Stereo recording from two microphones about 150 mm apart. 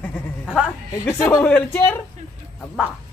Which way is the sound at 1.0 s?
15° left (ahead or behind).